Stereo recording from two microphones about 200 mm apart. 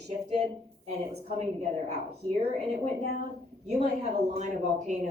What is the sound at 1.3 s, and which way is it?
Speech, 35° right (ahead or behind).